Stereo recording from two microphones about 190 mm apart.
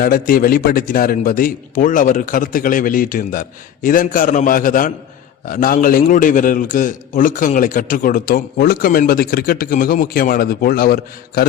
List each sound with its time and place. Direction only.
0.0 s a man's voice: 50° left (ahead or behind)